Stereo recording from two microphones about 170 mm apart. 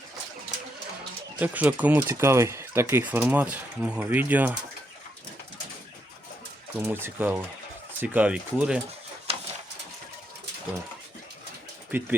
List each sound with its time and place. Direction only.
1.4 s speech: 10° right (ahead or behind)
6.7 s speech: 15° right (ahead or behind)
9.3 s a sound: 35° right (ahead or behind)
11.9 s speech: 10° right (ahead or behind)